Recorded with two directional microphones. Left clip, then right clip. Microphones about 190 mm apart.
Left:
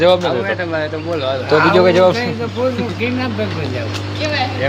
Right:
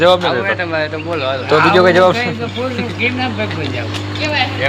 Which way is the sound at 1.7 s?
5° right (ahead or behind).